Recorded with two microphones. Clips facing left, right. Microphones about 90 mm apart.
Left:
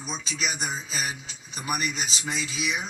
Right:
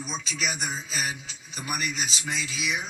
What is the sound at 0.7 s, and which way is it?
Speech, 35° left (ahead or behind).